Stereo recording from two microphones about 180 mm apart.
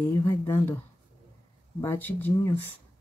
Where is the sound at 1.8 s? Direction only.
10° left (ahead or behind).